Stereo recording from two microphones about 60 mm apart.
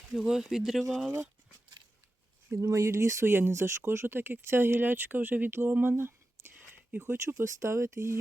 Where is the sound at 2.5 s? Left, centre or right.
Right.